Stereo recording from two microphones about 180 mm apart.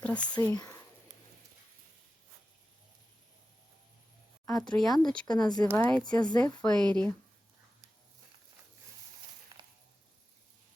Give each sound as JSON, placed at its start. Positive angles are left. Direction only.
{"t": 0.0, "sound": "speech", "side_deg": 5}
{"t": 4.7, "sound": "speech", "side_deg": 5}
{"t": 5.2, "sound": "speech", "side_deg": 20}
{"t": 5.6, "sound": "a woman's voice", "side_deg": 10}
{"t": 6.1, "sound": "speech", "side_deg": 25}
{"t": 6.6, "sound": "speech", "side_deg": 5}
{"t": 9.5, "sound": "a sound", "side_deg": -20}